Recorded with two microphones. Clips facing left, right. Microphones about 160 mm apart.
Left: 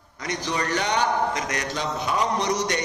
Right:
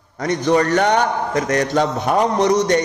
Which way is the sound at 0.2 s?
50° right (ahead or behind).